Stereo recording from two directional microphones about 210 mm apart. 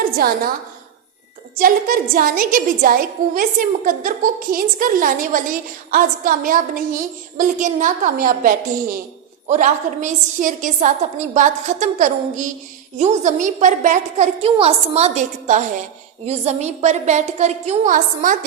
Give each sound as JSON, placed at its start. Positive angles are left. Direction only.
{"t": 0.2, "sound": "a woman's voice", "side_deg": -45}
{"t": 1.5, "sound": "a woman's voice", "side_deg": -40}